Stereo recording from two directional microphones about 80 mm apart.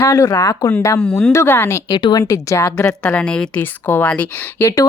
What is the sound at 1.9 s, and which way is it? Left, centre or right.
Speech, left.